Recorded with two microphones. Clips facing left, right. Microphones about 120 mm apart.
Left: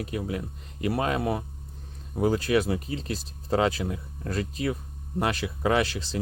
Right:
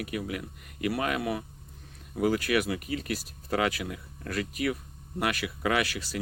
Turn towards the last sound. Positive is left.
turn(degrees=25)  # may be behind; listen again after turning